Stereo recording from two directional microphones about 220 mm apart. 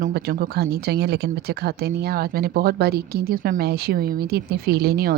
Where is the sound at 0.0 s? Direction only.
45° right (ahead or behind).